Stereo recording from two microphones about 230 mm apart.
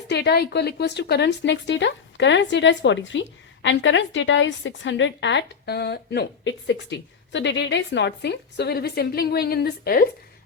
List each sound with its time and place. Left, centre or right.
0.1 s a woman's voice: left